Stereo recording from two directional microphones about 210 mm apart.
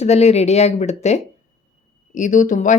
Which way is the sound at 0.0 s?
30° left (ahead or behind).